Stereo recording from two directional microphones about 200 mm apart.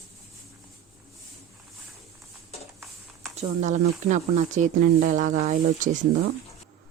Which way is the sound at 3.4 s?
35° right (ahead or behind).